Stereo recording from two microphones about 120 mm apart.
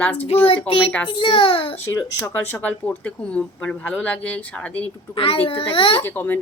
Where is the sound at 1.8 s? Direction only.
25° left (ahead or behind).